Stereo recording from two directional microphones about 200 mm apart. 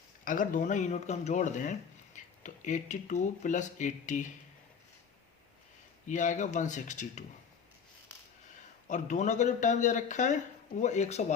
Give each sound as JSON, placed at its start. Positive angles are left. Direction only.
{"t": 0.3, "sound": "speech", "side_deg": 40}
{"t": 6.1, "sound": "speech", "side_deg": 40}
{"t": 8.9, "sound": "speech", "side_deg": 35}